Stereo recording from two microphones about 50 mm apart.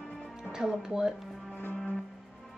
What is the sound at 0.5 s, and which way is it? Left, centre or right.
Speech, centre.